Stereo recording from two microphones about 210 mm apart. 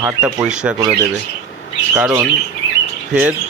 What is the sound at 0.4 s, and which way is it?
Speech, 5° right (ahead or behind).